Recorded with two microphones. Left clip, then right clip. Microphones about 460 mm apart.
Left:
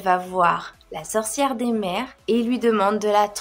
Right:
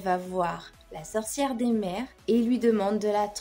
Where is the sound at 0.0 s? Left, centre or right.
Right.